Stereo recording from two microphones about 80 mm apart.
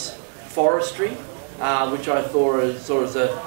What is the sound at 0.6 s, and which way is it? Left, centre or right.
Speech, centre.